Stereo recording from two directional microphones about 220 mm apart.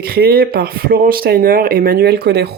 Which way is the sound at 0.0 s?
45° right (ahead or behind).